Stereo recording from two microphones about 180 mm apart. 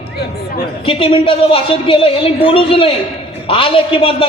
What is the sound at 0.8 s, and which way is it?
A man's voice, 30° left (ahead or behind).